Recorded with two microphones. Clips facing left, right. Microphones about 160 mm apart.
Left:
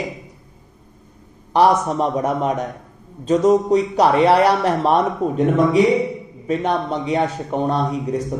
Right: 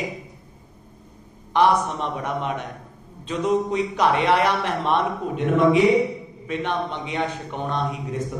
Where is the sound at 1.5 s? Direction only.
40° left (ahead or behind).